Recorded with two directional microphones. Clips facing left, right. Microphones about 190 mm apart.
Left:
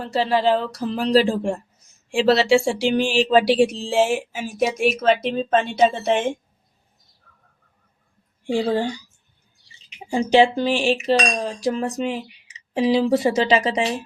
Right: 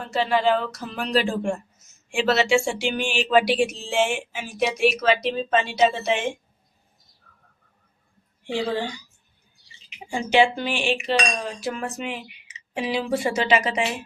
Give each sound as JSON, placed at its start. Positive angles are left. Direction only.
{"t": 0.0, "sound": "speech", "side_deg": 35}
{"t": 8.4, "sound": "speech", "side_deg": 45}
{"t": 10.1, "sound": "speech", "side_deg": 40}